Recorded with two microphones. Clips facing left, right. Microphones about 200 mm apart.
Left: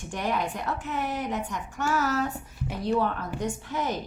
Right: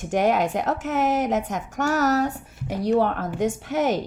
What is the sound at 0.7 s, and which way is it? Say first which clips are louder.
Speech: right 8 dB; 90° right.